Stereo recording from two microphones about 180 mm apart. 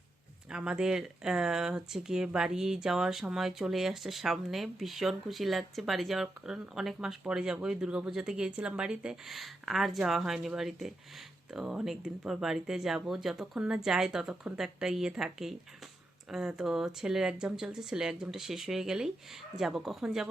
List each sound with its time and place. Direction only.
0.5 s speech: 5° right (ahead or behind)